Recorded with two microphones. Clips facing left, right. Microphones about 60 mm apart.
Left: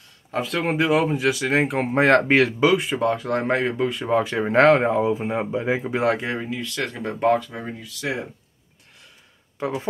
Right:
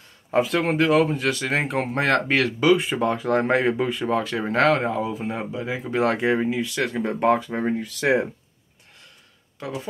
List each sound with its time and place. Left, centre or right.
0.3 s speech: centre
1.9 s speech: left
2.6 s speech: centre
4.0 s speech: centre
5.9 s speech: centre
6.1 s speech: centre
7.5 s speech: right